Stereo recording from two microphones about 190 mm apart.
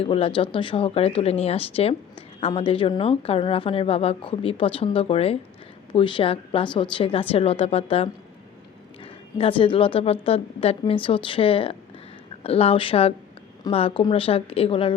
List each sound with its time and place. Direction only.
0.0 s speech: 25° left (ahead or behind)
9.4 s speech: 25° left (ahead or behind)